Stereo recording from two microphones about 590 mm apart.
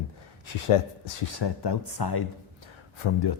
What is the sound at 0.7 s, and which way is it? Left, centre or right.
Speech, left.